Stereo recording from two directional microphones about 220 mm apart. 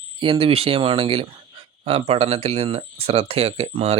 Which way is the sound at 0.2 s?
25° right (ahead or behind).